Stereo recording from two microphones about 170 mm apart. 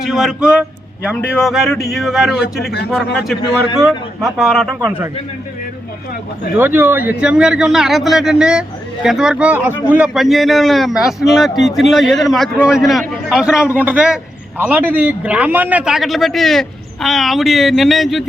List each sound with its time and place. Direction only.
0.0 s a man's voice: centre (ahead or behind)
3.8 s a man's voice: centre (ahead or behind)
6.6 s a man's voice: 10° right (ahead or behind)